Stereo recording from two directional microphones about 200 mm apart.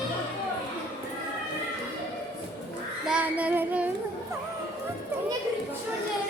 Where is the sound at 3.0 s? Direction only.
5° right (ahead or behind).